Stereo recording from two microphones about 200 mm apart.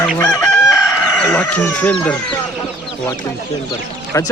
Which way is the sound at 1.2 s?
5° left (ahead or behind).